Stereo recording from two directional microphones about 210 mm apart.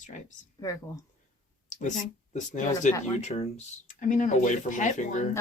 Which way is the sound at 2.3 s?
35° left (ahead or behind).